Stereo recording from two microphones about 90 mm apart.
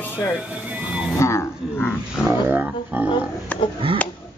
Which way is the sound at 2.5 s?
20° right (ahead or behind).